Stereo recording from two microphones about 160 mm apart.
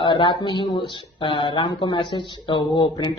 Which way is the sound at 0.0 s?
30° left (ahead or behind).